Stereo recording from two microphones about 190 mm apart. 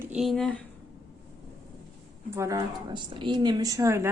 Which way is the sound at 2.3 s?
15° right (ahead or behind).